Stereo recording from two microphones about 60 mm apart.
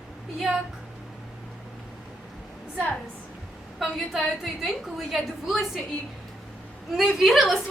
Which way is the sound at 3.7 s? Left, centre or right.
Centre.